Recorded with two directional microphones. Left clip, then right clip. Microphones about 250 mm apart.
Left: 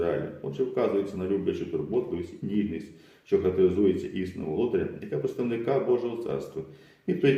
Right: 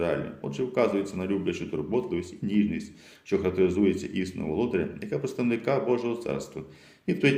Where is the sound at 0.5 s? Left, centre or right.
Right.